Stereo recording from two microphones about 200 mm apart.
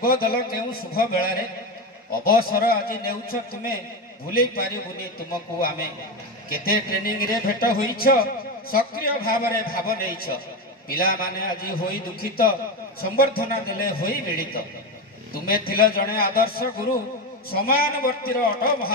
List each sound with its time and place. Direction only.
0.0 s a man's voice: 45° left (ahead or behind)
6.5 s a man's voice: 50° left (ahead or behind)